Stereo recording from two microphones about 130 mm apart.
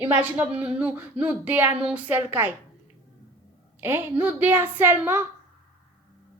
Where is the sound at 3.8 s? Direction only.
15° right (ahead or behind).